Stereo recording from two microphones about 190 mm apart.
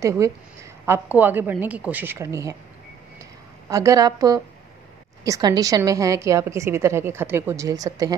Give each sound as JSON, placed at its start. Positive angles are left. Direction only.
{"t": 0.0, "sound": "a woman's voice", "side_deg": -15}
{"t": 3.6, "sound": "a woman's voice", "side_deg": -15}